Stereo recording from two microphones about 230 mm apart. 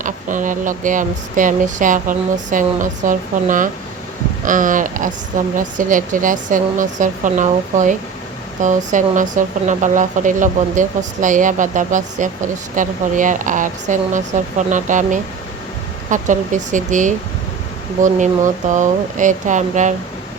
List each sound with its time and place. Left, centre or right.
0.0 s speech: right